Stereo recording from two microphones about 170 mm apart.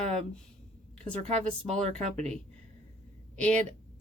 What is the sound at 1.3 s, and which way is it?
Speech, 40° right (ahead or behind).